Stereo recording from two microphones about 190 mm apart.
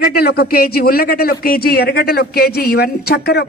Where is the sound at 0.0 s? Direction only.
55° left (ahead or behind).